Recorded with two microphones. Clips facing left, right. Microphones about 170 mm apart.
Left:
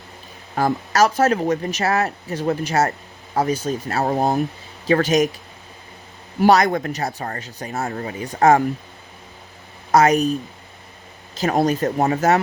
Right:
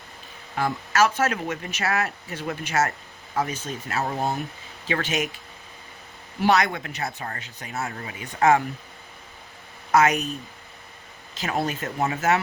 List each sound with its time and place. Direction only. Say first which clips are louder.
0.5 s speech: left 5 dB; 40° left (ahead or behind)
6.4 s speech: left 6 dB; 40° left (ahead or behind)
9.9 s speech: left 5 dB; 35° left (ahead or behind)
11.3 s speech: left 8 dB; 40° left (ahead or behind)